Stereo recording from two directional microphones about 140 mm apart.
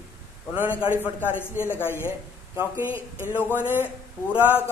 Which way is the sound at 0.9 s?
15° left (ahead or behind).